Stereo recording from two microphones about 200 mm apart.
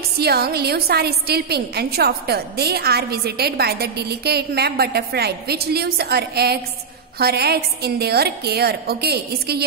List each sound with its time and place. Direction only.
0.2 s a woman's voice: 50° right (ahead or behind)